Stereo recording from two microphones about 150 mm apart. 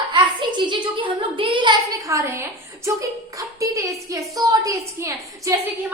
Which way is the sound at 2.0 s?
20° right (ahead or behind).